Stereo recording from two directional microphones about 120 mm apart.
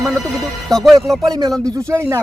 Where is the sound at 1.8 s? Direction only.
20° right (ahead or behind).